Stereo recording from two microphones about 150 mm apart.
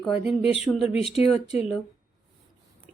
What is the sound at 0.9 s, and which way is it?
Speech, 40° left (ahead or behind).